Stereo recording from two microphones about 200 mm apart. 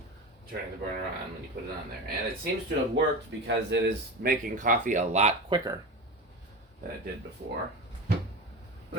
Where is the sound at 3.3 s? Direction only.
65° right (ahead or behind).